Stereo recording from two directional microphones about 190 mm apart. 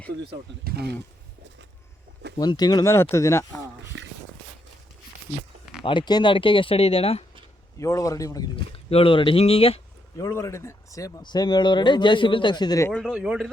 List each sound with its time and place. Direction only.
0.6 s speech: 55° right (ahead or behind)
2.4 s speech: 20° left (ahead or behind)
3.9 s a sound: 65° right (ahead or behind)
5.8 s speech: 25° left (ahead or behind)
7.8 s speech: 15° left (ahead or behind)
8.9 s speech: 30° left (ahead or behind)
10.2 s speech: 15° left (ahead or behind)
12.9 s speech: centre (ahead or behind)